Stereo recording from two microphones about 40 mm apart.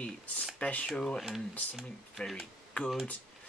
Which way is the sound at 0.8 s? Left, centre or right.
Centre.